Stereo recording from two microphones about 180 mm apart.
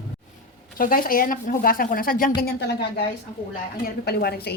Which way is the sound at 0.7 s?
50° left (ahead or behind).